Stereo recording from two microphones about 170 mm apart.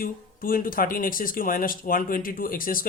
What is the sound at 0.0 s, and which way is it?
Speech, 55° left (ahead or behind).